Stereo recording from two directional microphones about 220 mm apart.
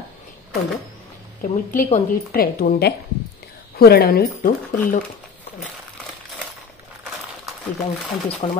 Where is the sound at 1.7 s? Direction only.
40° left (ahead or behind).